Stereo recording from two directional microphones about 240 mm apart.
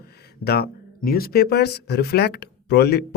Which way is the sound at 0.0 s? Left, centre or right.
Left.